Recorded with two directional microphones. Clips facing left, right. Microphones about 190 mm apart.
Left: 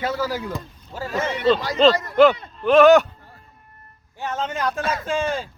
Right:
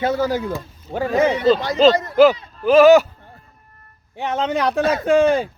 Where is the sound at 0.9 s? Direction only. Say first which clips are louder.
Right 8 dB; 60° right (ahead or behind).